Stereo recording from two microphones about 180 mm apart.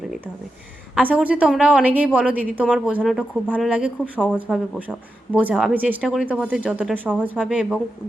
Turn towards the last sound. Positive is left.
turn(degrees=-5)  # may be behind; listen again after turning